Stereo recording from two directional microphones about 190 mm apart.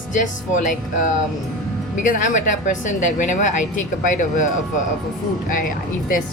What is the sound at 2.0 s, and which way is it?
A woman's voice, 40° left (ahead or behind).